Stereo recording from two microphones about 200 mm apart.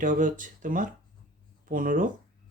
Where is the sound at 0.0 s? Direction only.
40° right (ahead or behind).